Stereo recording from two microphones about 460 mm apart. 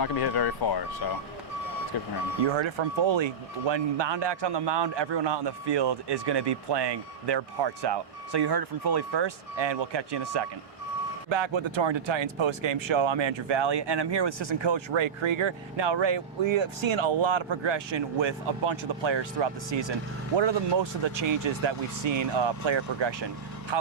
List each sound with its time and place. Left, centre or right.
0.0 s speech: left
2.4 s a man's voice: right
11.3 s speech: right